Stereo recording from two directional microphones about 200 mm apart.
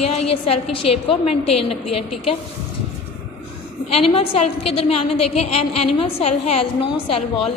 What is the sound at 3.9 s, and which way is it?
A woman's voice, 25° left (ahead or behind).